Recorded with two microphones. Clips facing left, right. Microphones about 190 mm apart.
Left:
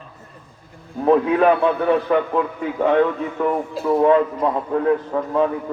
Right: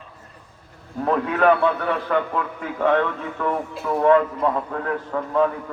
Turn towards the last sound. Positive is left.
turn(degrees=20)  # may be behind; listen again after turning